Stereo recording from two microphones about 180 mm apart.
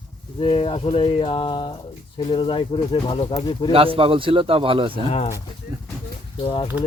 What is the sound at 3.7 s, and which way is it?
Speech, 30° right (ahead or behind).